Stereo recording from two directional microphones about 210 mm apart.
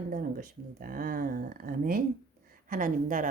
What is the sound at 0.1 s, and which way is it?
Speech, 40° right (ahead or behind).